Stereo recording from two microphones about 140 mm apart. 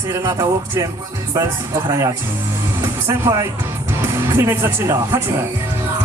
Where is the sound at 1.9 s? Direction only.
25° right (ahead or behind).